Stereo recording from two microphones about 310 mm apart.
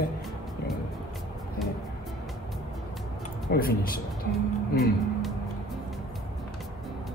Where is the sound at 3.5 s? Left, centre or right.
Left.